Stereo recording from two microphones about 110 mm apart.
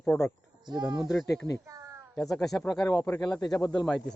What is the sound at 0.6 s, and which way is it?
Speech, 40° right (ahead or behind).